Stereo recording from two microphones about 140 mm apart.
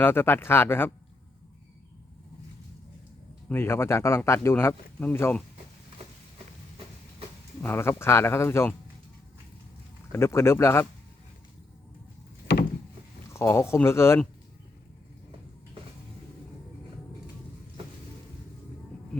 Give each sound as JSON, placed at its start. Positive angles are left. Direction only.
{"t": 0.0, "sound": "speech", "side_deg": 15}
{"t": 3.5, "sound": "speech", "side_deg": 15}
{"t": 7.6, "sound": "speech", "side_deg": 15}
{"t": 10.1, "sound": "speech", "side_deg": 20}
{"t": 13.3, "sound": "speech", "side_deg": 20}